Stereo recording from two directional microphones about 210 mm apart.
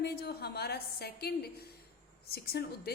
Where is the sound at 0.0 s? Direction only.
50° left (ahead or behind).